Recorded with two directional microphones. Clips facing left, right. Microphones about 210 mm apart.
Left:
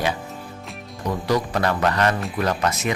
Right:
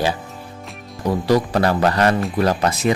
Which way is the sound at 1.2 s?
35° right (ahead or behind).